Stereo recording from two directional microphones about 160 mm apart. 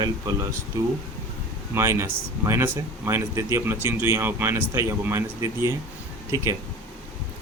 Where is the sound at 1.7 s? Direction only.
15° right (ahead or behind).